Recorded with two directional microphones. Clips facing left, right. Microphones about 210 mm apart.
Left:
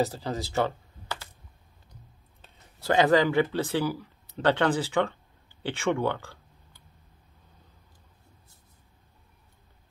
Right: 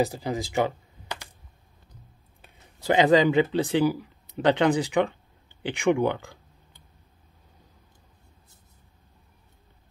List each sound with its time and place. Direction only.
0.0 s speech: 15° right (ahead or behind)
2.4 s speech: 15° right (ahead or behind)